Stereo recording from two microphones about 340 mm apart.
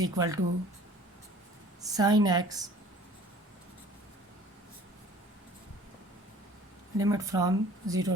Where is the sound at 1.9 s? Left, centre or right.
Centre.